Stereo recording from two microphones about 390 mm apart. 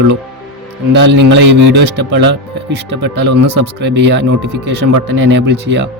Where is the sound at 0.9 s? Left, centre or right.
Right.